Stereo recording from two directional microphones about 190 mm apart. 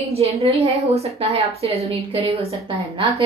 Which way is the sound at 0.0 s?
30° right (ahead or behind).